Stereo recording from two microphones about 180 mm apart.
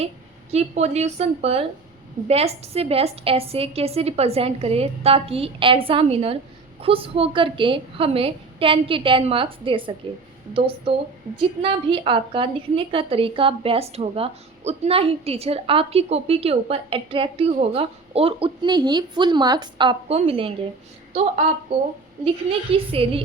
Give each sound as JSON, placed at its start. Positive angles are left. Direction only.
{"t": 0.5, "sound": "a woman's voice", "side_deg": -35}
{"t": 22.7, "sound": "a woman's voice", "side_deg": -30}